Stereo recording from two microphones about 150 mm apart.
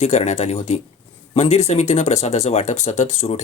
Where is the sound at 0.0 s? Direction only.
50° left (ahead or behind).